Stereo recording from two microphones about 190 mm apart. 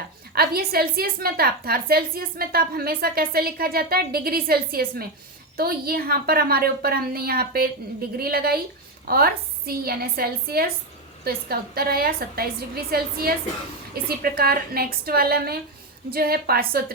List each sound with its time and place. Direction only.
0.3 s a woman's voice: 55° right (ahead or behind)